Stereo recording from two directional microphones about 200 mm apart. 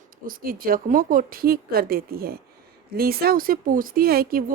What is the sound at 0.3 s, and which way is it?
Speech, 45° right (ahead or behind).